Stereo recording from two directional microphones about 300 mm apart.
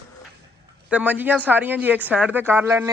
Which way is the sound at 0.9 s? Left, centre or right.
Centre.